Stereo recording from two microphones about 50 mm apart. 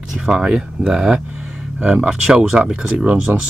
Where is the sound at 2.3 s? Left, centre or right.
Centre.